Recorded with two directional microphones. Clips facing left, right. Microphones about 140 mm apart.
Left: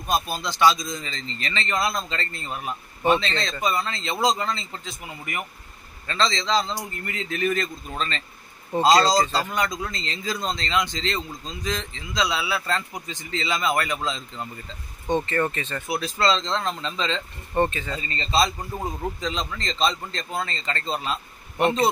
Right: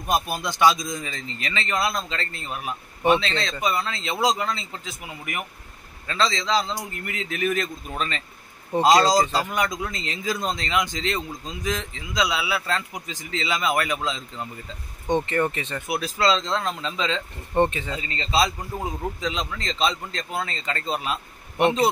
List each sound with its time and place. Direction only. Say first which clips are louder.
0.0 s a man's voice: right 1 dB; 15° right (ahead or behind)
15.0 s speech: right 1 dB; 15° right (ahead or behind)
17.6 s speech: right 2 dB; 20° right (ahead or behind)
18.1 s a man's voice: even; 5° right (ahead or behind)